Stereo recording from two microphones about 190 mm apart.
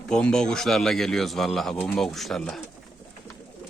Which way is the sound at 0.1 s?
5° left (ahead or behind).